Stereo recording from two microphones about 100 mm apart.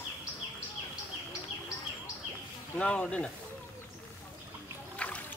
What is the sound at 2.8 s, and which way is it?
Speech, 10° left (ahead or behind).